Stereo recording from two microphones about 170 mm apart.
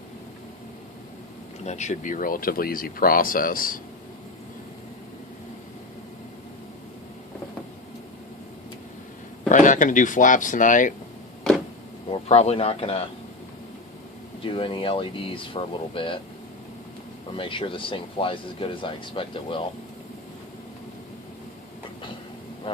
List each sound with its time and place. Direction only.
1.6 s speech: 45° left (ahead or behind)
9.5 s speech: 50° left (ahead or behind)
12.1 s speech: 40° left (ahead or behind)
14.4 s speech: 30° left (ahead or behind)
17.3 s speech: 30° left (ahead or behind)